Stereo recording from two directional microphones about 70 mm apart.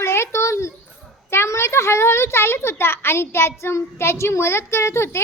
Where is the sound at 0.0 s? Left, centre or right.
Left.